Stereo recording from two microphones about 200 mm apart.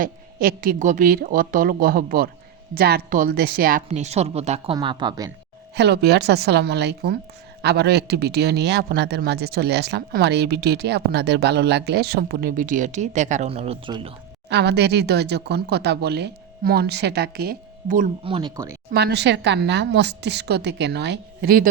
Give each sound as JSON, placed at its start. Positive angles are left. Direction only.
{"t": 0.0, "sound": "speech", "side_deg": -45}
{"t": 3.8, "sound": "speech", "side_deg": -35}
{"t": 5.7, "sound": "speech", "side_deg": -55}
{"t": 14.5, "sound": "speech", "side_deg": -55}
{"t": 18.2, "sound": "speech", "side_deg": -25}
{"t": 18.9, "sound": "speech", "side_deg": -55}